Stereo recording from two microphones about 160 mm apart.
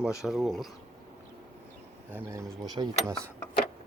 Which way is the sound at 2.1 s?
15° right (ahead or behind).